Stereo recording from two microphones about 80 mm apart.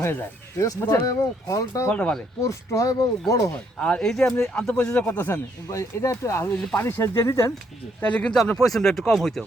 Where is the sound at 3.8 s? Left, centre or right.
Centre; by 5.4 s left.